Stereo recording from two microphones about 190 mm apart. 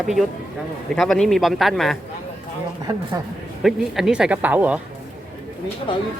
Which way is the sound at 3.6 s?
Centre (ahead or behind).